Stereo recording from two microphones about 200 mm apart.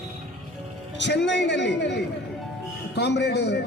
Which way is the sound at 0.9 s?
60° left (ahead or behind).